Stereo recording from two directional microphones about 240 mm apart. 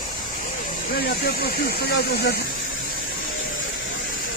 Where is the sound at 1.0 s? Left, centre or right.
Left.